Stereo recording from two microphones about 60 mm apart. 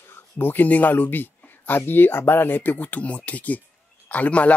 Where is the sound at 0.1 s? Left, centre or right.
Left.